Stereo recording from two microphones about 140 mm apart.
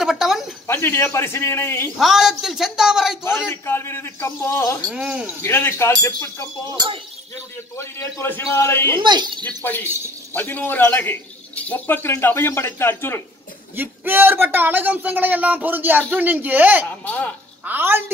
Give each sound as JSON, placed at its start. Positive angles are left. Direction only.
{"t": 0.0, "sound": "a sound", "side_deg": 0}
{"t": 0.7, "sound": "a man's voice", "side_deg": 15}
{"t": 2.0, "sound": "a woman's voice", "side_deg": 0}
{"t": 3.3, "sound": "a man's voice", "side_deg": 15}
{"t": 4.9, "sound": "a woman's voice", "side_deg": -5}
{"t": 5.4, "sound": "a man's voice", "side_deg": 20}
{"t": 8.9, "sound": "speech", "side_deg": -35}
{"t": 9.6, "sound": "a man's voice", "side_deg": 15}
{"t": 13.7, "sound": "speech", "side_deg": -15}
{"t": 17.0, "sound": "a man's voice", "side_deg": 10}
{"t": 17.6, "sound": "speech", "side_deg": -15}